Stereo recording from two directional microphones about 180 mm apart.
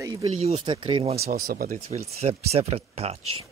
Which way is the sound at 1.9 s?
35° right (ahead or behind).